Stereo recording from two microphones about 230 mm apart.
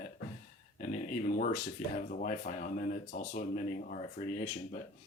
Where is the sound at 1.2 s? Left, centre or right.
Left.